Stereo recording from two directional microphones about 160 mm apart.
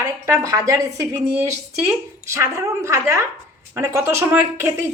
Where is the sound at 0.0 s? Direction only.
20° right (ahead or behind).